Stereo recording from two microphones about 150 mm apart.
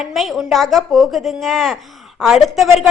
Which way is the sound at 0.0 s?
Centre (ahead or behind).